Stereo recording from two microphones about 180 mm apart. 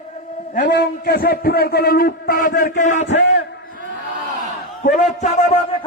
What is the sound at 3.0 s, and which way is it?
Speech, 85° left.